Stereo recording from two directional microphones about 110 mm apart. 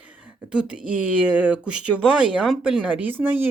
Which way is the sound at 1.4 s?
10° right (ahead or behind).